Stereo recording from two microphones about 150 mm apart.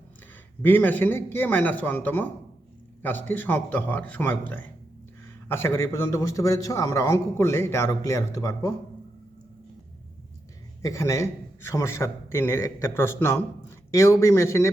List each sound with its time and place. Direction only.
0.6 s a man's voice: 15° left (ahead or behind)
10.8 s a man's voice: 20° left (ahead or behind)